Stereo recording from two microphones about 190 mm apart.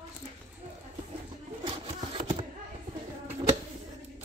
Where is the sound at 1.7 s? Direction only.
30° right (ahead or behind).